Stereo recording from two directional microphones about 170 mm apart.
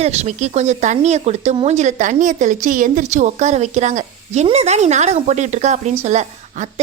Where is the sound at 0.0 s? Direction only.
40° right (ahead or behind).